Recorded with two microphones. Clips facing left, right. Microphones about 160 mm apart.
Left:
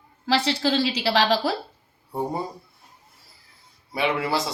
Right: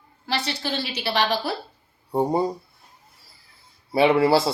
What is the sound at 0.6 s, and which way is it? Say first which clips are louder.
Speech: left 5 dB; 90° left.